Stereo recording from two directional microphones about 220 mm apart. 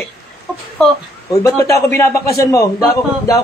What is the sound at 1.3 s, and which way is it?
A man's voice, 15° left (ahead or behind).